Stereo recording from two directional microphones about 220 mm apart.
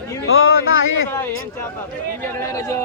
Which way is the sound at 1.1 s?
10° left (ahead or behind).